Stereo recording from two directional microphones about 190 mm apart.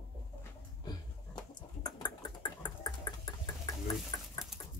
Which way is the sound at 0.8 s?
20° left (ahead or behind).